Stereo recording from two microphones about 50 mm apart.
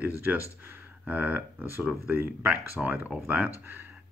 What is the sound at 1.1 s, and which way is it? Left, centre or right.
Speech, right.